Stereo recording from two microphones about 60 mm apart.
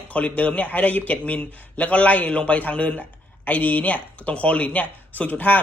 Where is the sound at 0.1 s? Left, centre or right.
Left.